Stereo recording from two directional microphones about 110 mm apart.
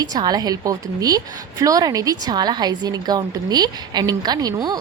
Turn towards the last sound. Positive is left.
turn(degrees=-35)  # may be behind; listen again after turning